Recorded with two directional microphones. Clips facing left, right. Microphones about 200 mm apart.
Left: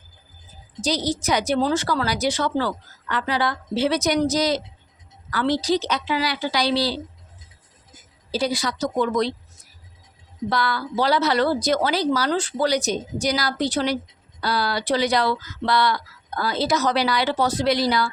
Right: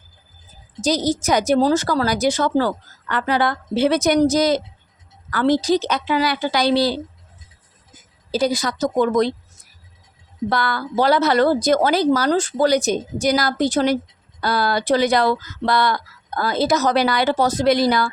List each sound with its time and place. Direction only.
0.8 s a woman's voice: 45° right (ahead or behind)
8.3 s a woman's voice: 45° right (ahead or behind)
10.5 s a woman's voice: 50° right (ahead or behind)